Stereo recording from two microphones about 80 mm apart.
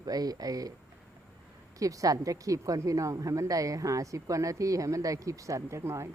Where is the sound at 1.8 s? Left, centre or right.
Right.